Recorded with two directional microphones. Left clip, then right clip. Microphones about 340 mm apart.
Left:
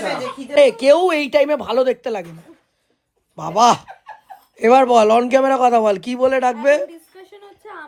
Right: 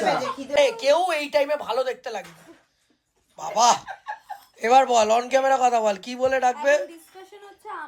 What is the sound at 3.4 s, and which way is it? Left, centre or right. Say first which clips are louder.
A man's voice: left 5 dB; centre.